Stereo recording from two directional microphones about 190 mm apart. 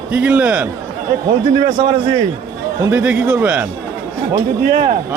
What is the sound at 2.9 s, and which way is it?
Speech, 5° right (ahead or behind).